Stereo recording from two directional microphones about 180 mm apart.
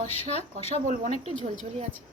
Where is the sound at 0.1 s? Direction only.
35° left (ahead or behind).